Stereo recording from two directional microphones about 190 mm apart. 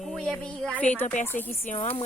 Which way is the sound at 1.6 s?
40° left (ahead or behind).